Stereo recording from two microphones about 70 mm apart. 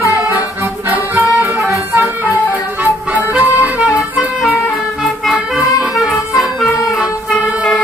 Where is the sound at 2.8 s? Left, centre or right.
Right.